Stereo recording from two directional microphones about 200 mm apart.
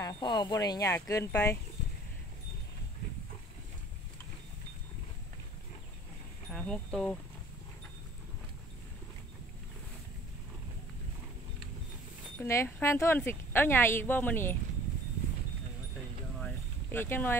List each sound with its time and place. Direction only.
0.0 s speech: 20° left (ahead or behind)
6.5 s speech: 5° left (ahead or behind)
12.4 s speech: 10° left (ahead or behind)
16.3 s boat: 10° left (ahead or behind)